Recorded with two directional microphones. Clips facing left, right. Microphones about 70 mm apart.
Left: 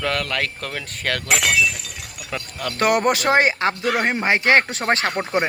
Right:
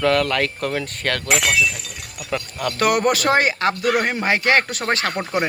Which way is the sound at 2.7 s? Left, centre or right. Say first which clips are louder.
Even; left.